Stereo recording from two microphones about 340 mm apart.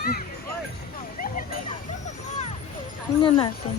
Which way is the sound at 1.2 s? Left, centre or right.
Left.